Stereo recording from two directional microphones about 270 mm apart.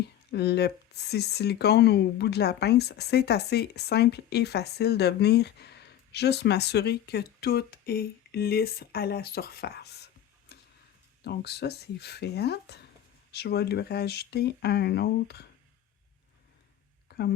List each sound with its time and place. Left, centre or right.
0.3 s speech: left
10.5 s tick-tock: left
11.2 s speech: left
17.1 s a sound: left